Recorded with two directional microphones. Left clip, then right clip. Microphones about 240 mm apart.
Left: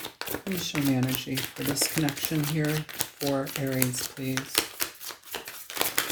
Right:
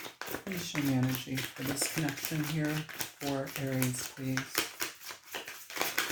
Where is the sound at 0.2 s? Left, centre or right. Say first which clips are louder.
Left 6 dB; left.